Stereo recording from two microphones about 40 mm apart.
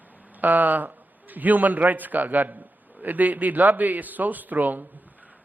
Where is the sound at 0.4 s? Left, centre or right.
Right.